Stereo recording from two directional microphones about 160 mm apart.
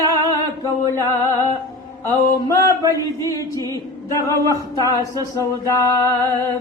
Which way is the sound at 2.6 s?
20° left (ahead or behind).